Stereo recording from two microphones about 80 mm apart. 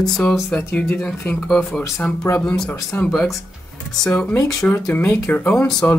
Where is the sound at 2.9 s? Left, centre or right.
Left.